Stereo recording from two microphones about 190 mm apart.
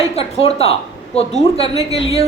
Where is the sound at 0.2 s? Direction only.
30° left (ahead or behind).